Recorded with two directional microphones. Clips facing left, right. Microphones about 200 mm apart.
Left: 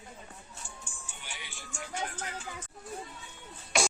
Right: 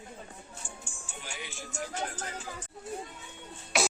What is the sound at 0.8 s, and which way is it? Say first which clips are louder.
Music: right 4 dB; 45° right (ahead or behind).